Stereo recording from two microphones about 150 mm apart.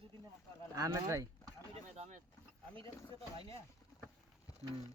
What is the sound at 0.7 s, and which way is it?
Speech, 20° right (ahead or behind).